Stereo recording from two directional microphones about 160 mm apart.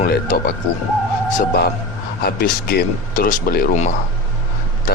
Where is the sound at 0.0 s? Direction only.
65° left (ahead or behind).